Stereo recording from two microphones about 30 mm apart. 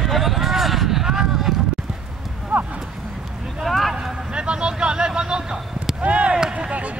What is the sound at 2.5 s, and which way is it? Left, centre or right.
Clip-clop, right.